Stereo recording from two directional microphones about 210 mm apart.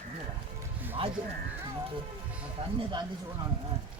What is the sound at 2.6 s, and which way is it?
Speech, 30° right (ahead or behind).